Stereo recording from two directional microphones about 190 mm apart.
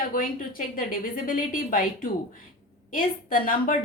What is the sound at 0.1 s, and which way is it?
A woman's voice, 50° left (ahead or behind).